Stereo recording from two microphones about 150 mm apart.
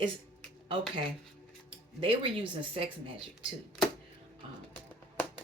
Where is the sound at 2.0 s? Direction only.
40° right (ahead or behind).